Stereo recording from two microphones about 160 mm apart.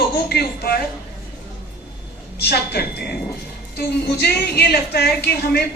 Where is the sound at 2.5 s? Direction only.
90° left.